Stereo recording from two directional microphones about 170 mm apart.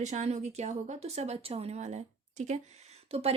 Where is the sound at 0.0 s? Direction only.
45° right (ahead or behind).